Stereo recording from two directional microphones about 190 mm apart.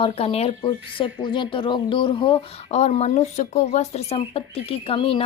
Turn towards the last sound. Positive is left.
turn(degrees=30)  # may be behind; listen again after turning